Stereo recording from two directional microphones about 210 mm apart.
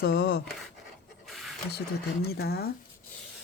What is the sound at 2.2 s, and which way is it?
Speech, 50° left (ahead or behind).